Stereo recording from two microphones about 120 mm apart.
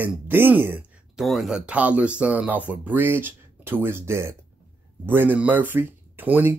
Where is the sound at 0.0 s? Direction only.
15° right (ahead or behind).